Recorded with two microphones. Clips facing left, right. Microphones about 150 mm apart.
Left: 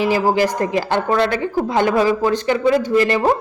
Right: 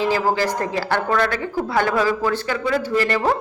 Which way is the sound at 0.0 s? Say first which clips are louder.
Left 3 dB; 15° left (ahead or behind).